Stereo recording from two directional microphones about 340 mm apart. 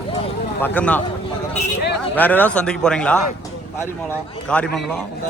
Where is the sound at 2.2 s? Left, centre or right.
Centre.